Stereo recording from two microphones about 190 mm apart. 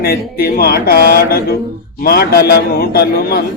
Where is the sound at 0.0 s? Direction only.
55° left (ahead or behind).